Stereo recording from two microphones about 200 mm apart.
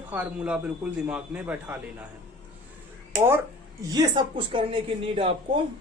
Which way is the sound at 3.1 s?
10° right (ahead or behind).